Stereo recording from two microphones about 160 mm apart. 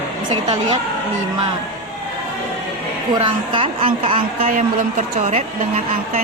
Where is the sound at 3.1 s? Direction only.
30° right (ahead or behind).